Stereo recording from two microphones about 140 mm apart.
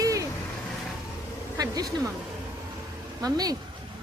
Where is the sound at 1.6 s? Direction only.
25° right (ahead or behind).